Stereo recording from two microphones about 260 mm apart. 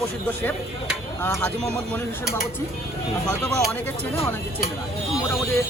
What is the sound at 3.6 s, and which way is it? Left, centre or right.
Speech, centre.